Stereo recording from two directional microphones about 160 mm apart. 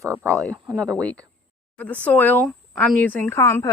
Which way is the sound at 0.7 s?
5° left (ahead or behind).